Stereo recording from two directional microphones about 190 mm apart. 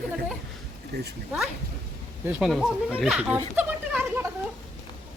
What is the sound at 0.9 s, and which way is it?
Speech, 60° right (ahead or behind).